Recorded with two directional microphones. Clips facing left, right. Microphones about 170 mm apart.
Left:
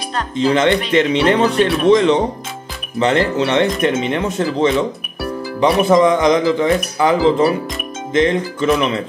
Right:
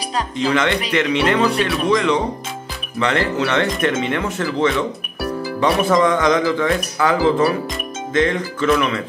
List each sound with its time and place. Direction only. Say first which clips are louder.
0.5 s speech: left 5 dB; 30° left (ahead or behind)